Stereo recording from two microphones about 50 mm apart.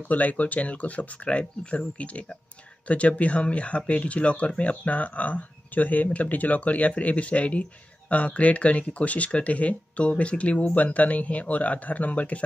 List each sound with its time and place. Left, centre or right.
0.1 s speech: left